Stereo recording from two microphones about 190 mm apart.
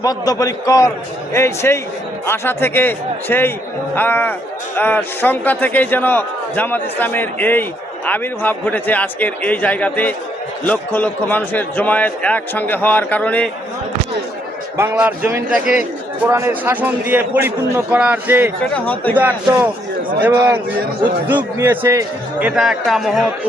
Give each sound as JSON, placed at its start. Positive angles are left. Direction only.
{"t": 0.0, "sound": "a man's voice", "side_deg": 20}
{"t": 14.8, "sound": "a man's voice", "side_deg": -5}
{"t": 18.7, "sound": "a man's voice", "side_deg": 10}
{"t": 19.1, "sound": "a man's voice", "side_deg": -10}
{"t": 21.6, "sound": "a man's voice", "side_deg": -10}